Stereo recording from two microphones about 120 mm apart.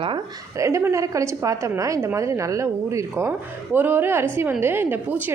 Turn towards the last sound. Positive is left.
turn(degrees=-15)  # may be behind; listen again after turning